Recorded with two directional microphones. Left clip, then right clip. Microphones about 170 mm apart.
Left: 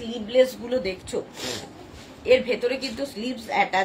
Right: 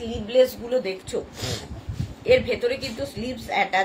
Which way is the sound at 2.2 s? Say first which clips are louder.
Even; 20° right (ahead or behind).